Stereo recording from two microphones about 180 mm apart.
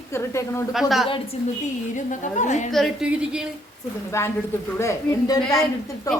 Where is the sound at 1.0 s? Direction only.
30° left (ahead or behind).